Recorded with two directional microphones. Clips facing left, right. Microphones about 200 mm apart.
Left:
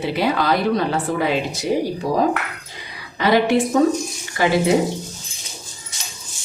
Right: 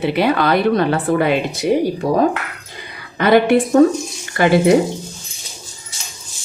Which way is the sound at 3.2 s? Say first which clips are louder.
Right 4 dB; 55° right (ahead or behind).